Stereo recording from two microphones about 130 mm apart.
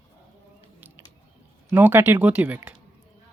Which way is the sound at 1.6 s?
15° right (ahead or behind).